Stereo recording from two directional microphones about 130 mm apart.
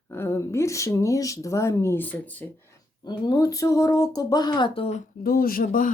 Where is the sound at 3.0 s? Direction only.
35° left (ahead or behind).